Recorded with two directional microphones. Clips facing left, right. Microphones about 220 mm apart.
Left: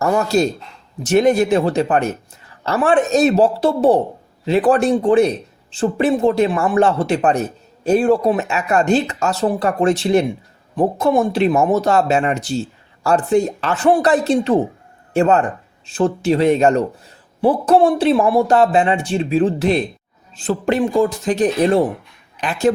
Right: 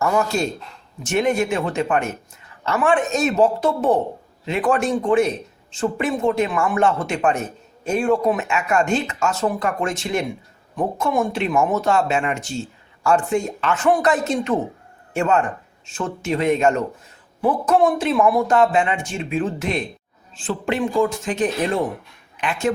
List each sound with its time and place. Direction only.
0.0 s speech: 35° left (ahead or behind)